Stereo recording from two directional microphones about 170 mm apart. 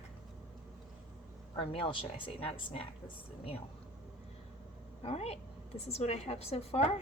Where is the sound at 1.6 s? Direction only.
35° left (ahead or behind).